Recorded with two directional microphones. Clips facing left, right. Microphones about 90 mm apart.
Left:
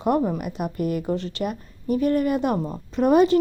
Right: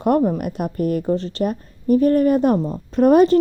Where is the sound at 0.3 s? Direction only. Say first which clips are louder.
Right 4 dB; 45° right (ahead or behind).